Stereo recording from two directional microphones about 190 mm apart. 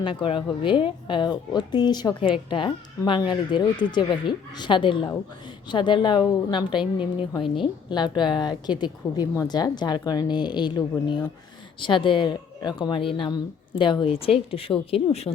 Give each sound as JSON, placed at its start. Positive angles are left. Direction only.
{"t": 0.0, "sound": "a woman's voice", "side_deg": 25}